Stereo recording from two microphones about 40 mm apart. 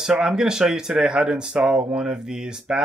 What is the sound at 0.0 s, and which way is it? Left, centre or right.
Speech, centre.